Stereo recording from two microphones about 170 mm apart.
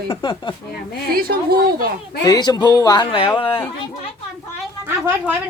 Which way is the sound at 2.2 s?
25° left (ahead or behind).